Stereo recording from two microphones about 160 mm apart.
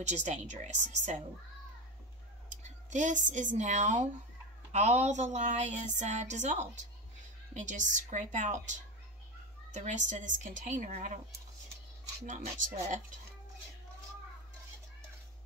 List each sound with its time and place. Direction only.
0.0 s a woman's voice: 45° right (ahead or behind)
2.5 s a sound: 50° right (ahead or behind)
3.5 s a woman's voice: 45° right (ahead or behind)
12.3 s a woman's voice: 45° right (ahead or behind)